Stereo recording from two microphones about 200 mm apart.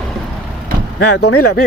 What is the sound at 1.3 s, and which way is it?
Speech, 90° left.